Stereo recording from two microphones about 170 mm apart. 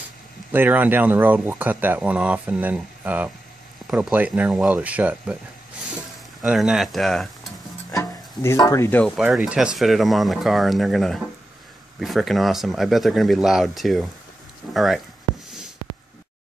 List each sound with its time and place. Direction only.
0.5 s speech: 10° right (ahead or behind)
6.4 s speech: 5° right (ahead or behind)
7.9 s speech: 15° left (ahead or behind)
9.0 s speech: centre (ahead or behind)